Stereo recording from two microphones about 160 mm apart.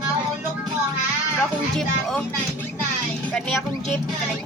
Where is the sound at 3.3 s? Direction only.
5° left (ahead or behind).